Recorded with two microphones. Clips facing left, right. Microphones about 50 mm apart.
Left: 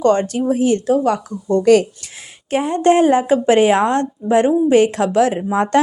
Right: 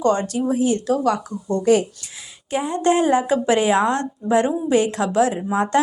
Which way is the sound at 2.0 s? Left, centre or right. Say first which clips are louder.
Left 2 dB; left.